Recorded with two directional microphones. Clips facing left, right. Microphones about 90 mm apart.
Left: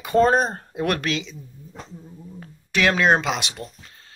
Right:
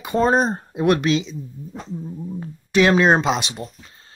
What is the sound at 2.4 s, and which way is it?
Speech, 25° right (ahead or behind).